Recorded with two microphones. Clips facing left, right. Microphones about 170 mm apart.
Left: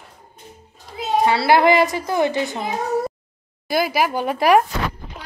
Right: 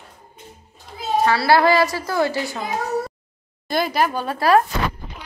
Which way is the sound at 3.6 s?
5° left (ahead or behind).